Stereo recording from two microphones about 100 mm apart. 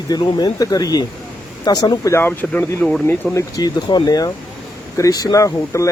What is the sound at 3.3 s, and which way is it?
Speech, 40° left (ahead or behind).